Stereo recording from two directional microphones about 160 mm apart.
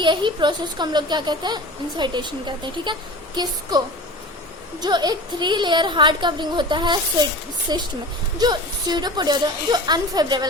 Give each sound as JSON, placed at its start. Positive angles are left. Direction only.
{"t": 0.0, "sound": "speech", "side_deg": -30}